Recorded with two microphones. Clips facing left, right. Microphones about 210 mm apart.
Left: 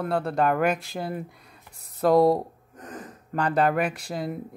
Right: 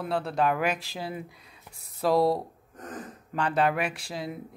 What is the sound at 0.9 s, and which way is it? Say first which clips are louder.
Speech: left 4 dB; 55° left (ahead or behind).